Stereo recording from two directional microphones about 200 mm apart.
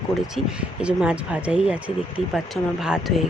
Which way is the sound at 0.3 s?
5° right (ahead or behind).